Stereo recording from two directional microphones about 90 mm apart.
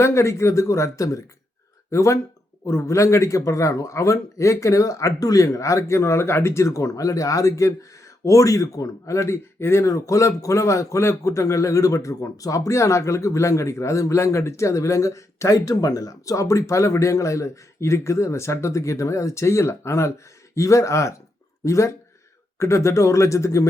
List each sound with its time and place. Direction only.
0.0 s a man's voice: 30° left (ahead or behind)